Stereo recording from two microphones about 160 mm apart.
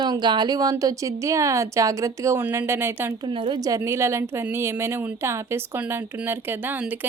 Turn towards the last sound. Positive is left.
turn(degrees=-10)  # may be behind; listen again after turning